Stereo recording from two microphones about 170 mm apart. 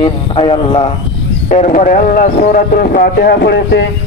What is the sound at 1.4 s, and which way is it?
Speech, 45° left (ahead or behind).